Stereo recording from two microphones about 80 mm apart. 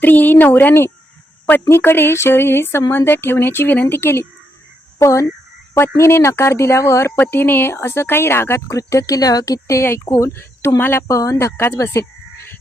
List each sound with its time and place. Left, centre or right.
0.0 s speech: left
4.9 s a woman's voice: left
7.2 s a woman's voice: left
11.1 s a woman's voice: left